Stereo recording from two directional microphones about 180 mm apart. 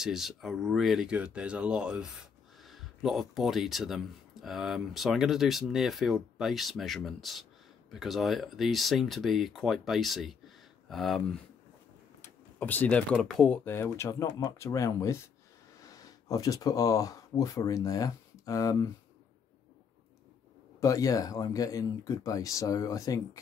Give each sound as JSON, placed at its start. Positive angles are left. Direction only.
{"t": 0.0, "sound": "speech", "side_deg": 0}
{"t": 20.8, "sound": "speech", "side_deg": 20}